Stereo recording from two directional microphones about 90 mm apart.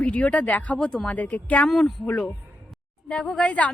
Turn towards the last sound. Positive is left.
turn(degrees=15)  # may be behind; listen again after turning